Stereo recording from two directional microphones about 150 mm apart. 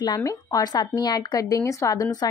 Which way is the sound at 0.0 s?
25° left (ahead or behind).